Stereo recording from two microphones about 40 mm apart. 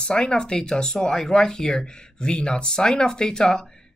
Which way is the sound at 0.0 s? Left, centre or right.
Left.